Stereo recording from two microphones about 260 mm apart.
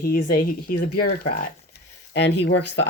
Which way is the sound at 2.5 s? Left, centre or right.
Left.